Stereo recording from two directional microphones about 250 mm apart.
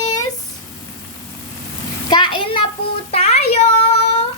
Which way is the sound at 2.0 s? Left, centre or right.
Centre.